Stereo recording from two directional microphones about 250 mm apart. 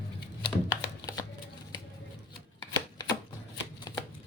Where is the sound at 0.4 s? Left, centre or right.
Centre.